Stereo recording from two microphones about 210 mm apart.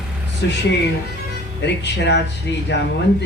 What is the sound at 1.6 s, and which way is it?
A man's voice, 55° left (ahead or behind).